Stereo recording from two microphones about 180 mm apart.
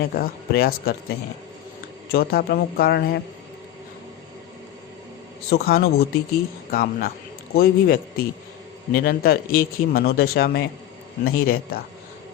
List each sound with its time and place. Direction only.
0.1 s a man's voice: 55° left (ahead or behind)
2.1 s a man's voice: 55° left (ahead or behind)
5.5 s a man's voice: 60° left (ahead or behind)